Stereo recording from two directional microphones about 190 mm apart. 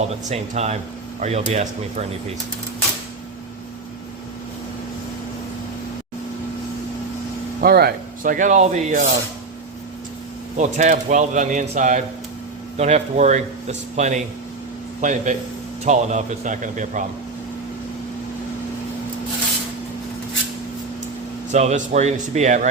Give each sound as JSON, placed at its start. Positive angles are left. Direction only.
{"t": 0.3, "sound": "a man's voice", "side_deg": -35}
{"t": 7.6, "sound": "speech", "side_deg": -55}
{"t": 10.6, "sound": "a man's voice", "side_deg": -40}
{"t": 21.5, "sound": "a man's voice", "side_deg": -35}